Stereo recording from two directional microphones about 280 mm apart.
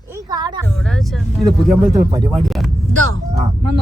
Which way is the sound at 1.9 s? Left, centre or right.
Centre.